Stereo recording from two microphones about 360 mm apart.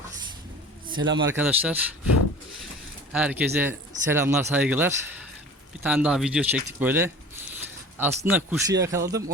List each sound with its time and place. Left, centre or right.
0.9 s speech: right
1.3 s speech: centre
3.1 s speech: centre